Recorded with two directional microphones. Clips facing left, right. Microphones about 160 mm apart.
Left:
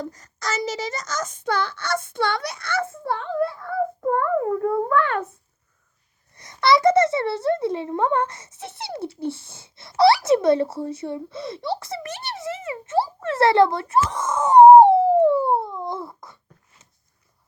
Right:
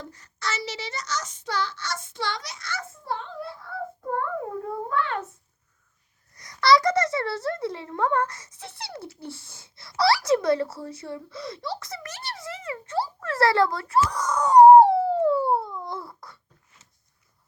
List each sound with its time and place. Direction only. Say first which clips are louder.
0.0 s a child's voice: left 4 dB; 45° left (ahead or behind); by 5.2 s 60° left (ahead or behind)
6.3 s a child's voice: left 1 dB; 25° left (ahead or behind)